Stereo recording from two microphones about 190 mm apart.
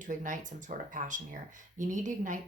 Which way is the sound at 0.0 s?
40° right (ahead or behind).